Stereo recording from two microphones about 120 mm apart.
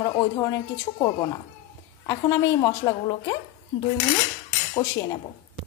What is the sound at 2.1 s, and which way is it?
A woman's voice, 30° left (ahead or behind).